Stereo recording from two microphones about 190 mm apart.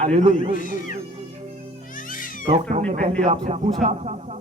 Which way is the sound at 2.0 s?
45° left (ahead or behind).